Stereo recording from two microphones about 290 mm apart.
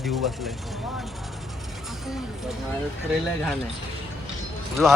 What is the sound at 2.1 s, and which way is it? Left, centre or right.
Speech, centre.